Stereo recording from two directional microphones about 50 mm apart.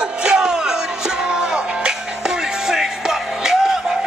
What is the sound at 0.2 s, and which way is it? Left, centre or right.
Music, centre.